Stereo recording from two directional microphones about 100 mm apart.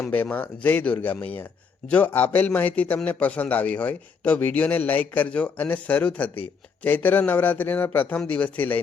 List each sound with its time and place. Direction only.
0.0 s speech: 15° left (ahead or behind)